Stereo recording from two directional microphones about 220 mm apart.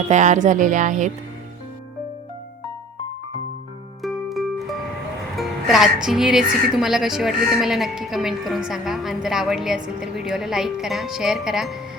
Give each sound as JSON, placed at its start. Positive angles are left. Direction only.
{"t": 0.1, "sound": "speech", "side_deg": -35}
{"t": 4.0, "sound": "music", "side_deg": 0}
{"t": 5.4, "sound": "speech", "side_deg": 0}